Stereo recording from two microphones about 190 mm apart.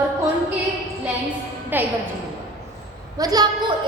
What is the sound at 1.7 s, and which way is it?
Speech, 10° right (ahead or behind).